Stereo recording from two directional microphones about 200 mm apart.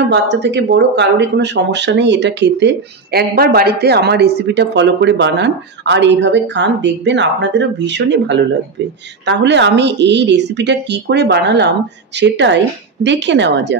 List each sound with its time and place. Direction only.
0.1 s speech: 60° right (ahead or behind)